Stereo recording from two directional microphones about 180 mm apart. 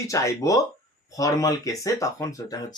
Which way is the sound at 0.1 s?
15° left (ahead or behind).